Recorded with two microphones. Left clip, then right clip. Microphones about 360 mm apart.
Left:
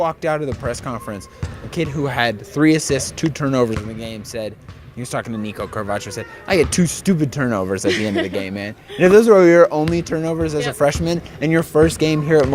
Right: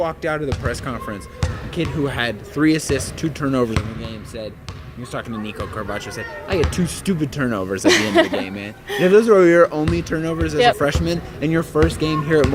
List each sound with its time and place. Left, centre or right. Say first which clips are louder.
0.0 s speech: left 2 dB; left
4.0 s speech: left 4 dB; left
7.9 s speech: right 8 dB; right
8.4 s speech: left 2 dB; left